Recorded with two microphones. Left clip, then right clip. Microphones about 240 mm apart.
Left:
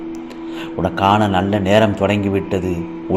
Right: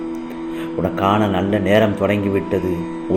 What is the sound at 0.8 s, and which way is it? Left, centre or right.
A man's voice, centre.